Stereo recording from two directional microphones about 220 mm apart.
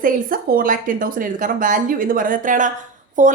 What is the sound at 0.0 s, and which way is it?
Speech, 40° right (ahead or behind).